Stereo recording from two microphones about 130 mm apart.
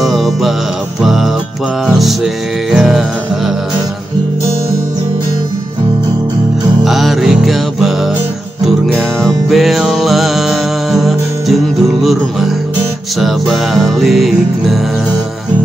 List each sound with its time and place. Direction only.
0.0 s music: centre (ahead or behind)
6.8 s music: centre (ahead or behind)